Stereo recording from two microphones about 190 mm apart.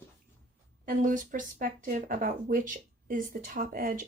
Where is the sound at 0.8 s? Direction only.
45° right (ahead or behind).